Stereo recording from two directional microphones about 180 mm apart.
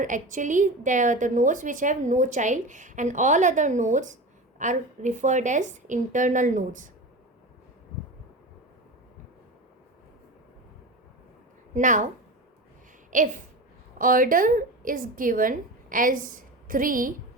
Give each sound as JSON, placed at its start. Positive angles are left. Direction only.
{"t": 0.0, "sound": "a woman's voice", "side_deg": -45}
{"t": 11.7, "sound": "a woman's voice", "side_deg": -45}
{"t": 13.1, "sound": "a woman's voice", "side_deg": -45}